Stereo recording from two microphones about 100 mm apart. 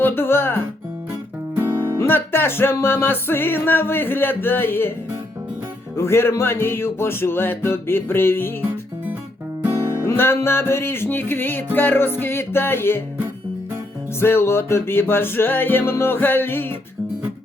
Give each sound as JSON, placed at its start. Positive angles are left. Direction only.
{"t": 0.0, "sound": "music", "side_deg": 20}
{"t": 1.6, "sound": "music", "side_deg": -45}
{"t": 2.0, "sound": "music", "side_deg": 20}
{"t": 6.0, "sound": "music", "side_deg": 25}
{"t": 9.9, "sound": "music", "side_deg": 25}
{"t": 14.2, "sound": "music", "side_deg": 25}